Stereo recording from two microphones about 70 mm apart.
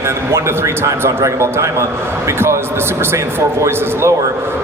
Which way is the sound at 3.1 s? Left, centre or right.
Right.